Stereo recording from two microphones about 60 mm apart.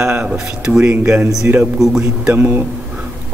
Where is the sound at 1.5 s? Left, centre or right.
Right.